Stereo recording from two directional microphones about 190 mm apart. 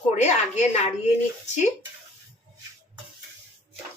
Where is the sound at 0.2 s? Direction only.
35° left (ahead or behind).